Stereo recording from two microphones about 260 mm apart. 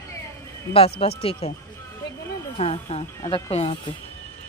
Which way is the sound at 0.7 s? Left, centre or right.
Left.